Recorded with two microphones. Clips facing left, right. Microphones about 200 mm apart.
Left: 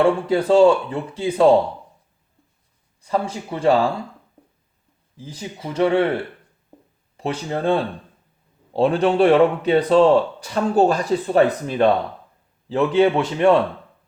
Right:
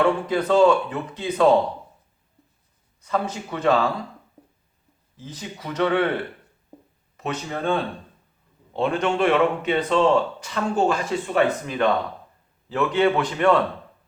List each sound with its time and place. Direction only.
0.0 s speech: 30° left (ahead or behind)
3.0 s speech: 30° left (ahead or behind)
5.1 s speech: 10° left (ahead or behind)
5.4 s speech: 25° left (ahead or behind)
7.2 s speech: 30° left (ahead or behind)